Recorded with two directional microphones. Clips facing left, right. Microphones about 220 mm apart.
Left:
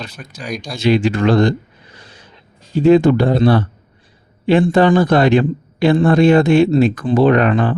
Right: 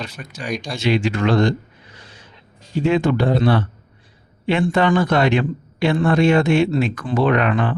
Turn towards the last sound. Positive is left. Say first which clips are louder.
# left 5 dB
turn(degrees=35)  # may be behind; listen again after turning